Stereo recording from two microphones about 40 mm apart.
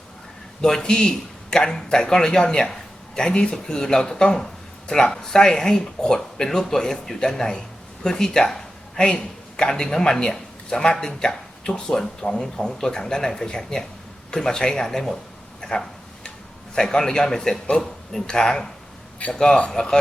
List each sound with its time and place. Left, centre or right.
0.6 s speech: centre
15.6 s a sound: centre
16.7 s speech: centre